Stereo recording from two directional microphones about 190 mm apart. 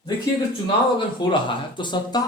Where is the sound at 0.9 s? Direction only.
25° left (ahead or behind).